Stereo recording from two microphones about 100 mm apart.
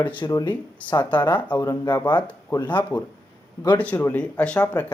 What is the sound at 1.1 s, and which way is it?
Speech, 50° left (ahead or behind).